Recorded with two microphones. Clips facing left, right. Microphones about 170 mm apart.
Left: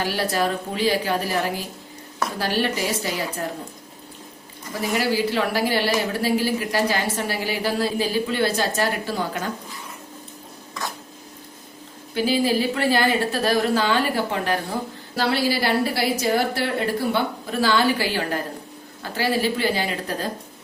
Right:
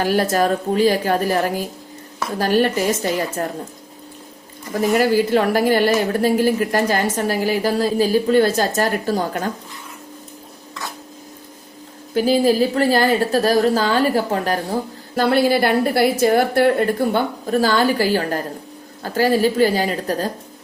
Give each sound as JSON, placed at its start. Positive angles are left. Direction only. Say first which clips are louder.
{"t": 0.0, "sound": "a woman's voice", "louder": "right 6 dB", "side_deg": -45}
{"t": 4.7, "sound": "a woman's voice", "louder": "right 7 dB", "side_deg": -50}
{"t": 12.1, "sound": "a woman's voice", "louder": "right 5 dB", "side_deg": -45}
{"t": 15.1, "sound": "a woman's voice", "louder": "right 6 dB", "side_deg": -50}